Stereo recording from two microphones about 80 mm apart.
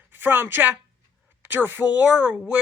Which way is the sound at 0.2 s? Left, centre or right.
Right.